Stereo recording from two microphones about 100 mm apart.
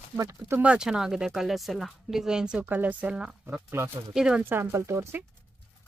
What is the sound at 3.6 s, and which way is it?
Speech, 25° right (ahead or behind).